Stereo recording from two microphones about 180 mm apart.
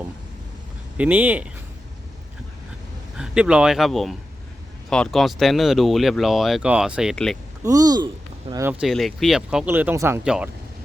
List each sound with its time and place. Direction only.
0.9 s speech: 10° right (ahead or behind)
3.2 s speech: 5° right (ahead or behind)
7.6 s speech: 20° right (ahead or behind)
8.6 s speech: centre (ahead or behind)